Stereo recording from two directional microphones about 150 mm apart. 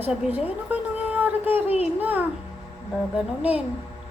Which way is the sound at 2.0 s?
10° right (ahead or behind).